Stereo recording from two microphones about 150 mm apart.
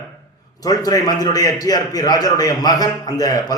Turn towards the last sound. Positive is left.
turn(degrees=25)  # may be behind; listen again after turning